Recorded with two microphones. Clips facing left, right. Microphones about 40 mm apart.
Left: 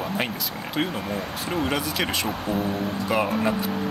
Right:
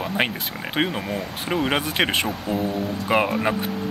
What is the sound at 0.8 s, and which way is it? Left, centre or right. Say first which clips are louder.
Speech: right 3 dB; right.